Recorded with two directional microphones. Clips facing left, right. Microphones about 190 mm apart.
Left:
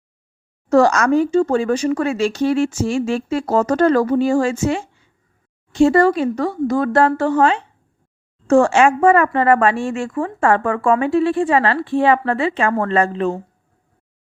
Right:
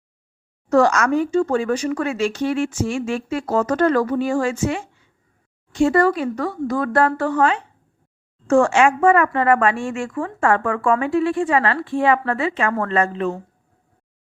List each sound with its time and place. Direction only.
0.7 s speech: 35° left (ahead or behind)